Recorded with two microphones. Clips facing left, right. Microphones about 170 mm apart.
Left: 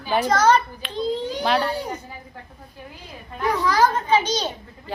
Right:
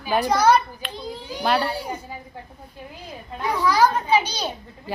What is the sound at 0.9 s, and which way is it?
Children playing, 10° right (ahead or behind).